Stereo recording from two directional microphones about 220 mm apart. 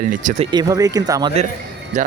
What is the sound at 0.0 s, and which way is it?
Speech, 35° right (ahead or behind).